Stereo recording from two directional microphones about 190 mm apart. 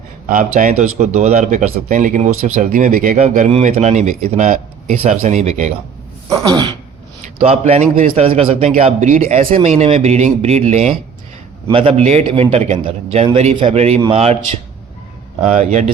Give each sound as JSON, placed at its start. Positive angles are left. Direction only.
{"t": 0.3, "sound": "speech", "side_deg": -45}
{"t": 6.3, "sound": "a sound", "side_deg": -20}
{"t": 7.2, "sound": "a man's voice", "side_deg": -35}
{"t": 8.4, "sound": "a sound", "side_deg": -30}
{"t": 8.7, "sound": "speech", "side_deg": -35}
{"t": 9.4, "sound": "speech", "side_deg": -30}
{"t": 15.5, "sound": "speech", "side_deg": -40}